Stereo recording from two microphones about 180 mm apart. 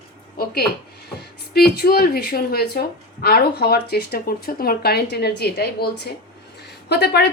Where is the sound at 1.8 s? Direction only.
55° left (ahead or behind).